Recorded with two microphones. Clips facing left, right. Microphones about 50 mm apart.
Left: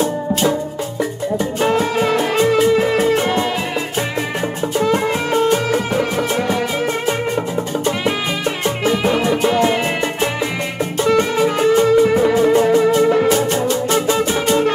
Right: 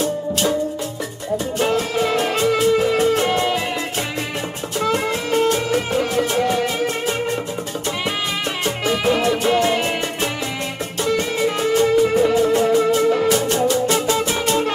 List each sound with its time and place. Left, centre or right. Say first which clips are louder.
0.0 s music: left 3 dB; left
4.7 s music: left 3 dB; left
9.0 s music: even; centre